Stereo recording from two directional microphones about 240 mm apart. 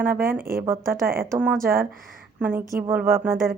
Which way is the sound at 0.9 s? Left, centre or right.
Centre.